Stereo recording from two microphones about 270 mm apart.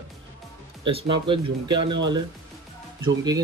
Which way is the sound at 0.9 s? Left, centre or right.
Centre.